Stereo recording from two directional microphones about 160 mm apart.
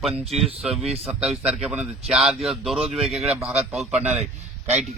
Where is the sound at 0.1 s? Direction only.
40° right (ahead or behind).